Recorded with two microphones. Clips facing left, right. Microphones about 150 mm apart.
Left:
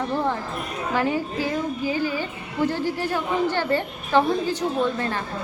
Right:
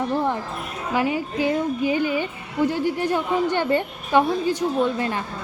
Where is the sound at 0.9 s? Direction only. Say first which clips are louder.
Right 1 dB; 10° right (ahead or behind).